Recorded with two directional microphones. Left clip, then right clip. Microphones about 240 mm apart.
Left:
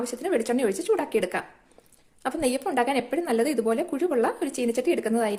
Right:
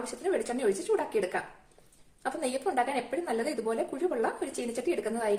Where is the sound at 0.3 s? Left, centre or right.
Left.